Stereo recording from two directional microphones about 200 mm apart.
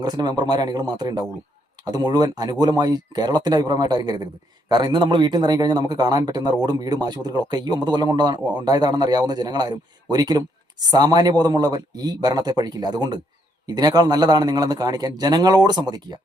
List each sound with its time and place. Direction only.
0.0 s a man's voice: 20° right (ahead or behind)